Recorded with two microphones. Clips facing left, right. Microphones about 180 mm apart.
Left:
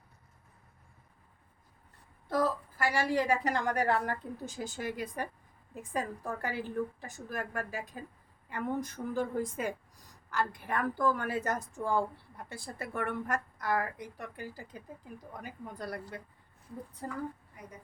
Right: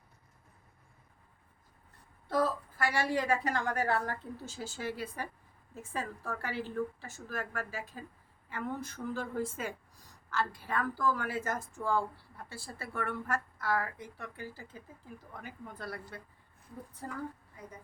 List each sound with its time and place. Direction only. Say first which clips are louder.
2.9 s a woman's voice: left 2 dB; 10° left (ahead or behind)